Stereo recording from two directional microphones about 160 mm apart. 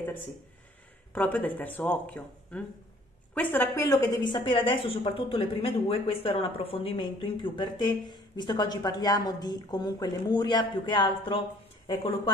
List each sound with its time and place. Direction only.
1.1 s a woman's voice: 10° left (ahead or behind); by 11.4 s 30° left (ahead or behind)